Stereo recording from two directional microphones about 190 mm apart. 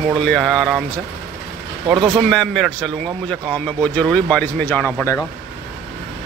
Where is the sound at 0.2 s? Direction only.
5° left (ahead or behind).